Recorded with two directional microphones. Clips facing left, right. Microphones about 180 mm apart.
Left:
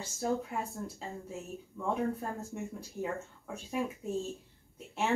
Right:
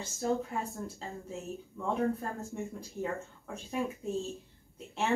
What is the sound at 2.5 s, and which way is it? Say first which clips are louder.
Speech: right 1 dB; 5° left (ahead or behind).